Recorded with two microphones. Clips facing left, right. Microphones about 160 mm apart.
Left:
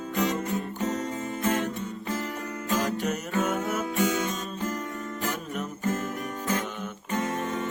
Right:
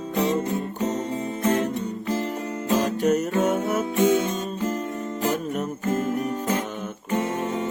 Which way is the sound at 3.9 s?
25° right (ahead or behind).